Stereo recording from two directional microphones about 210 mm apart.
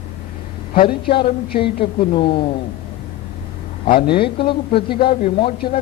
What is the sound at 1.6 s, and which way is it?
Speech, 25° left (ahead or behind).